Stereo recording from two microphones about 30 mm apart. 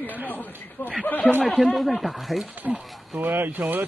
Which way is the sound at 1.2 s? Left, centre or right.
Centre.